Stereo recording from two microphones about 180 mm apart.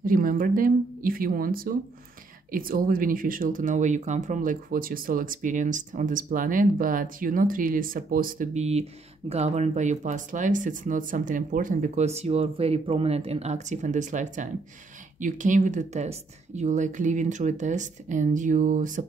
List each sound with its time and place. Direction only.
0.0 s speech: 50° right (ahead or behind)